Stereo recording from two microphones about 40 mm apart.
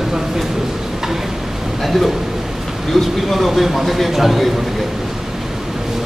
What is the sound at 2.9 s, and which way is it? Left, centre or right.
Speech, centre.